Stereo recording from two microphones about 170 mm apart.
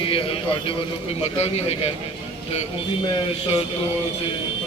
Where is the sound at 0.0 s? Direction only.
30° left (ahead or behind).